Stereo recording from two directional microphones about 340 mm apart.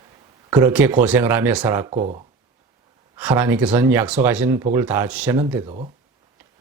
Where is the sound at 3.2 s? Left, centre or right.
Centre.